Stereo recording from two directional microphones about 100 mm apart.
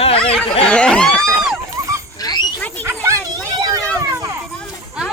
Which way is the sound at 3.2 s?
40° right (ahead or behind).